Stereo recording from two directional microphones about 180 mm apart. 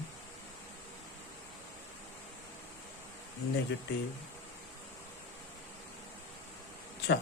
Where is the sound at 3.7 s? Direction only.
80° left.